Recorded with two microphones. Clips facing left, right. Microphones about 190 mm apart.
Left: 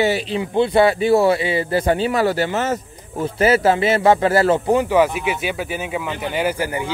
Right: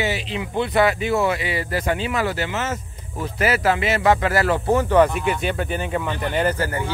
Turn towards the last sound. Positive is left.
turn(degrees=15)  # may be behind; listen again after turning